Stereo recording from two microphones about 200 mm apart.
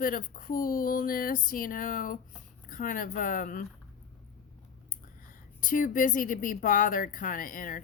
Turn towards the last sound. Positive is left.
turn(degrees=45)  # may be behind; listen again after turning